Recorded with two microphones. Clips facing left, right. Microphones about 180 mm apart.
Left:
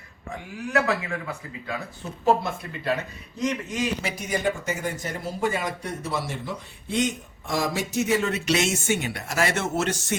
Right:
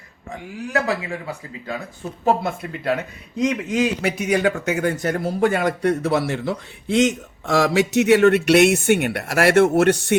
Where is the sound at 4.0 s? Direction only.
65° right (ahead or behind).